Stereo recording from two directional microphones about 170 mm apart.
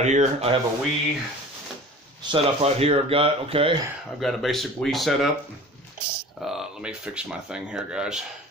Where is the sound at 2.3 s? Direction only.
35° right (ahead or behind).